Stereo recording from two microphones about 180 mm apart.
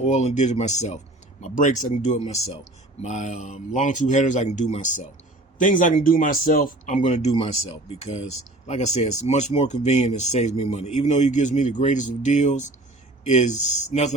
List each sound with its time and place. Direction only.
0.0 s speech: 35° left (ahead or behind)